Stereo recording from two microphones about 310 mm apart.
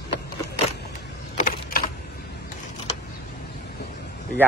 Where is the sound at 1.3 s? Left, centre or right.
Left.